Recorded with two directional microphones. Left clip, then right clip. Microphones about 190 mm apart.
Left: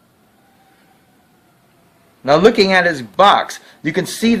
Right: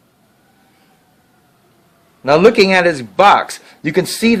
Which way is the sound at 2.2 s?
40° right (ahead or behind).